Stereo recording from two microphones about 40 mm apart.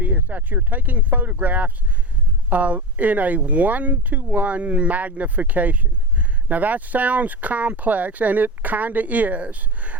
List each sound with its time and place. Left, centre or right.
0.0 s speech: right